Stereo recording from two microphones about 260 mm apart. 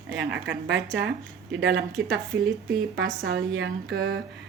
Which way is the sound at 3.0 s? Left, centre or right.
Right.